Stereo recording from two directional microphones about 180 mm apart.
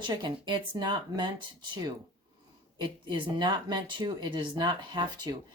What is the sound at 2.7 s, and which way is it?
Speech, 25° right (ahead or behind).